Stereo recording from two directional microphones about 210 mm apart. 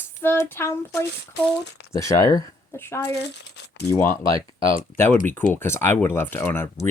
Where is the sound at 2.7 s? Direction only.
10° left (ahead or behind).